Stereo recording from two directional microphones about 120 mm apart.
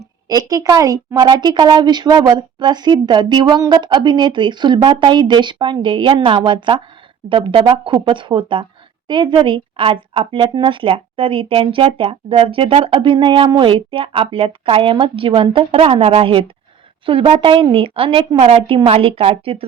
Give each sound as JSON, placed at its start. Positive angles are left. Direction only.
{"t": 0.3, "sound": "a woman's voice", "side_deg": -30}